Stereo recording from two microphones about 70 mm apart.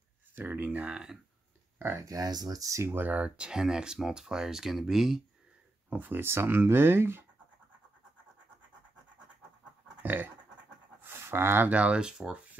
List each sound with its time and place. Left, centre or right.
0.3 s speech: right; by 1.1 s centre
2.0 s speech: right
2.8 s speech: right; by 5.2 s centre
5.9 s speech: right
10.0 s dog: right
11.0 s a sound: right
11.6 s speech: centre